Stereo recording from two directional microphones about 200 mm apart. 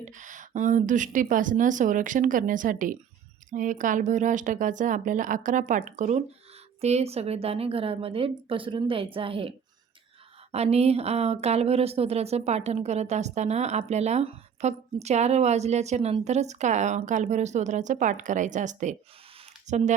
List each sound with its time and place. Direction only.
0.0 s a woman's voice: 40° right (ahead or behind)